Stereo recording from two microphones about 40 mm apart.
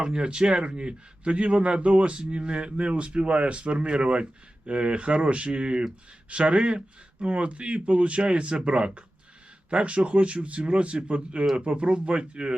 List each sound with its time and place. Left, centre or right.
0.0 s a man's voice: right